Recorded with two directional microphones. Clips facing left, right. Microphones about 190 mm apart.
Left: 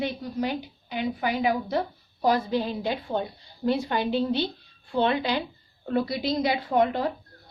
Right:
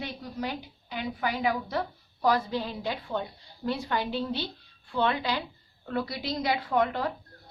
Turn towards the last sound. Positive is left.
turn(degrees=25)  # may be behind; listen again after turning